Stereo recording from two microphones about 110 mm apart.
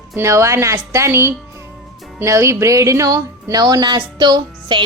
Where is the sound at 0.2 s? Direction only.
25° right (ahead or behind).